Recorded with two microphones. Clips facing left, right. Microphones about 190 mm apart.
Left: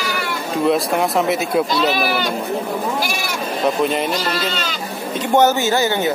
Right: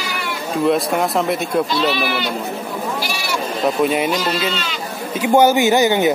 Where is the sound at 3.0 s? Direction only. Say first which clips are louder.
Left 1 dB; 50° left (ahead or behind).